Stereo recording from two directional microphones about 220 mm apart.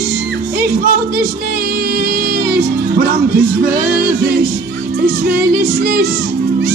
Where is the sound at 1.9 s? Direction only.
40° right (ahead or behind).